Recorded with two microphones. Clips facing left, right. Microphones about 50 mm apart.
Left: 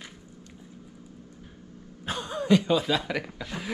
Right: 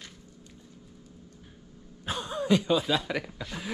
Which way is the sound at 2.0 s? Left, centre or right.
Left.